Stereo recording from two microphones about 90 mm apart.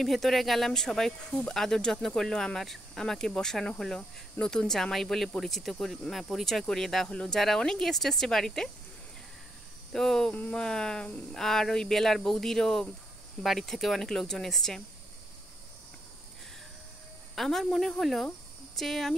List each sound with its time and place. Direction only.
0.0 s speech: centre (ahead or behind)
9.9 s speech: 5° left (ahead or behind)
10.3 s a sound: 15° left (ahead or behind)
10.6 s speech: 5° left (ahead or behind)
17.4 s speech: 5° left (ahead or behind)